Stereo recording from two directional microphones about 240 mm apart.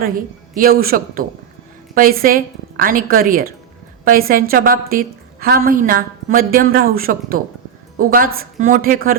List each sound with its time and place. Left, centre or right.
0.0 s a woman's voice: right